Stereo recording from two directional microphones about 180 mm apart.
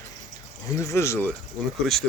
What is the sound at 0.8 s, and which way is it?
Speech, 15° left (ahead or behind).